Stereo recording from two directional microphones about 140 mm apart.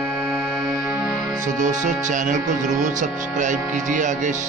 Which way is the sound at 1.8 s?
65° right (ahead or behind).